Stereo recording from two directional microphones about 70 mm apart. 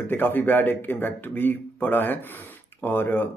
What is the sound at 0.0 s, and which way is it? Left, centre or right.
Speech, left.